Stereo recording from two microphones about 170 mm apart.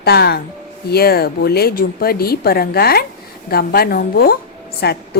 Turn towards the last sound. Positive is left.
turn(degrees=70)  # may be behind; listen again after turning